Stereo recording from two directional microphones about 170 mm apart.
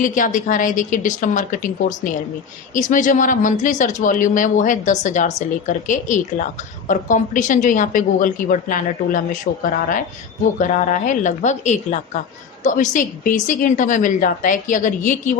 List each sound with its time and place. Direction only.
0.0 s a woman's voice: 50° left (ahead or behind)